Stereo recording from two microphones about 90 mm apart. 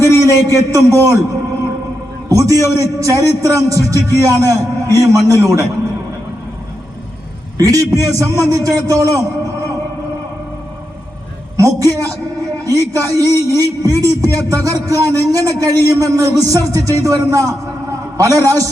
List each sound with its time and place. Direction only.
0.0 s a man's voice: 40° right (ahead or behind)
2.3 s a man's voice: 35° right (ahead or behind)
7.6 s a man's voice: 40° right (ahead or behind)
11.5 s a man's voice: 40° right (ahead or behind)